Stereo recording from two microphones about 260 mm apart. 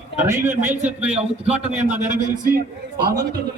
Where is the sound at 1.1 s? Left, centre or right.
Right.